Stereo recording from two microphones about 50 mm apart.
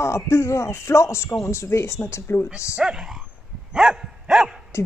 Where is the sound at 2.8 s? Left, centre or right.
Centre.